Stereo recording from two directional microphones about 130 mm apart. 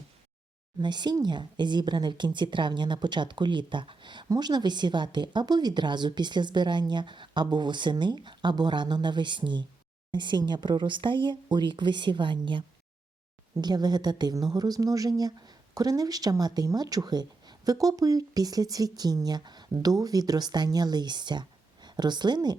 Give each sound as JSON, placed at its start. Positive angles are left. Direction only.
{"t": 0.8, "sound": "a woman's voice", "side_deg": -35}